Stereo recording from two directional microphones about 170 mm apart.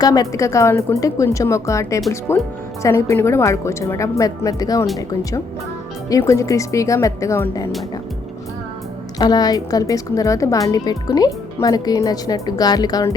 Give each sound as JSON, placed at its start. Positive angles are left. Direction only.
{"t": 0.0, "sound": "a woman's voice", "side_deg": 20}
{"t": 6.1, "sound": "a woman's voice", "side_deg": 20}
{"t": 9.1, "sound": "a woman's voice", "side_deg": 25}